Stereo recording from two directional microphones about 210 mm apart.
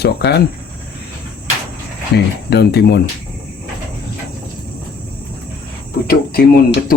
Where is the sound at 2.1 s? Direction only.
50° left (ahead or behind).